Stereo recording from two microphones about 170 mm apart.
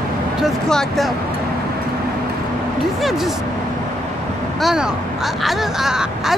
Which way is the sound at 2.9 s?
Centre (ahead or behind).